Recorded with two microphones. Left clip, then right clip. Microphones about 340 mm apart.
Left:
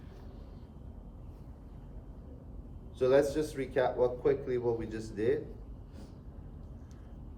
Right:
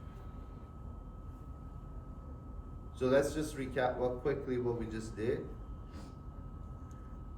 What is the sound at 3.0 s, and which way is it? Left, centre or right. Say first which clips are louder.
Speech: left 4 dB; centre.